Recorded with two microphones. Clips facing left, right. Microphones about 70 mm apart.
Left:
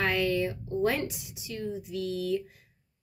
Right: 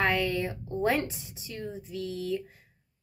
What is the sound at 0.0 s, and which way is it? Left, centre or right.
Speech, right.